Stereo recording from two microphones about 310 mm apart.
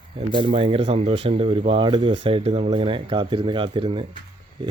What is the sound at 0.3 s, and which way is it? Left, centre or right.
Speech, centre.